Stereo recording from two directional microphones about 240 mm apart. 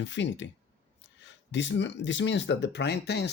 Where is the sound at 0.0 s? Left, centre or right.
Left.